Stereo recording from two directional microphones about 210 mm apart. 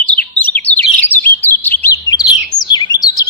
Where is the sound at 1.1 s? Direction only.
10° left (ahead or behind).